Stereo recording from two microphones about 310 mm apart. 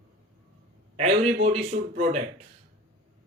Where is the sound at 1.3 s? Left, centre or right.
Right.